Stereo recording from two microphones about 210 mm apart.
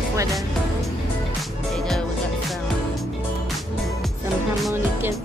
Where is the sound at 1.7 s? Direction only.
Centre (ahead or behind).